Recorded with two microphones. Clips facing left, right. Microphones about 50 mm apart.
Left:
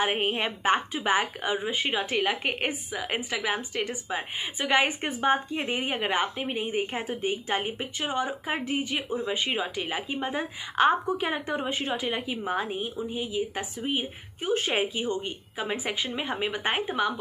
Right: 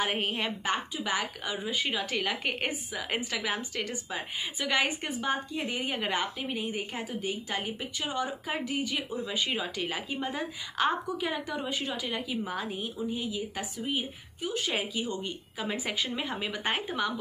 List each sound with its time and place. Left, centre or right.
0.0 s speech: left
14.4 s speech: left